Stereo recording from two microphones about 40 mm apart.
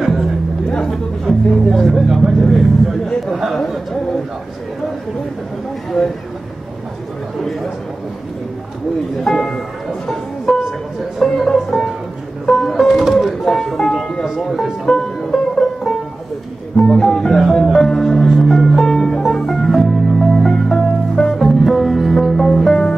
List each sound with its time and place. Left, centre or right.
0.0 s music: centre
0.7 s a sound: centre
1.2 s speech: centre
2.4 s vehicle: centre
3.6 s a sound: centre
6.0 s speech: centre
9.2 s music: centre
14.2 s music: centre
17.4 s music: centre